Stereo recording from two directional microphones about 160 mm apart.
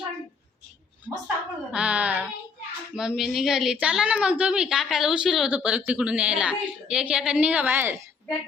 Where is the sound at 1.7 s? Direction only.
5° right (ahead or behind).